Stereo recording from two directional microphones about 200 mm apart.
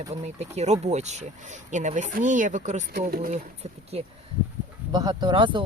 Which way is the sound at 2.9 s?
45° right (ahead or behind).